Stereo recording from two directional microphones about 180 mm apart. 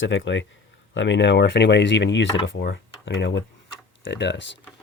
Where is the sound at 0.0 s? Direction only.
90° left.